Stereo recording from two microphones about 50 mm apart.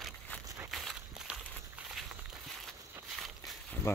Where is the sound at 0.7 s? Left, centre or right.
Centre.